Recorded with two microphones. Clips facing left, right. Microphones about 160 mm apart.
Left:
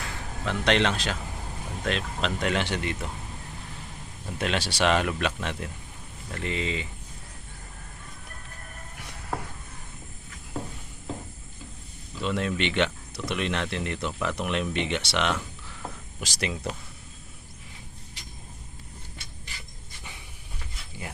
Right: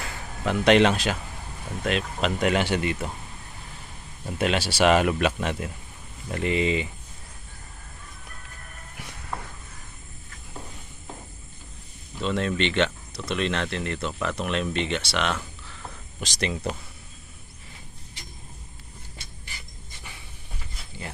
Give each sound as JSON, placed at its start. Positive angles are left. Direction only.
{"t": 0.0, "sound": "a sound", "side_deg": -10}
{"t": 1.8, "sound": "speech", "side_deg": -5}
{"t": 4.4, "sound": "speech", "side_deg": -5}
{"t": 12.2, "sound": "speech", "side_deg": 10}
{"t": 16.2, "sound": "speech", "side_deg": 5}